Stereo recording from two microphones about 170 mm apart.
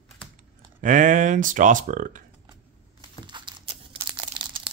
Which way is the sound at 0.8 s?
50° right (ahead or behind).